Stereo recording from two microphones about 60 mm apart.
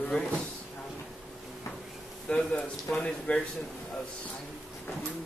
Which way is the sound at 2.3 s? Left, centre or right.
Centre.